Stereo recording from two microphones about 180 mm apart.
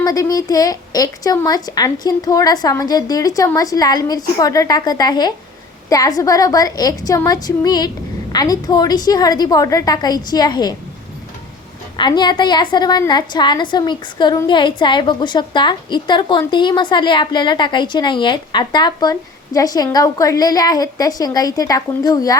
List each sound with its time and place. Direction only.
0.0 s a woman's voice: 20° left (ahead or behind)
11.9 s a woman's voice: 25° left (ahead or behind)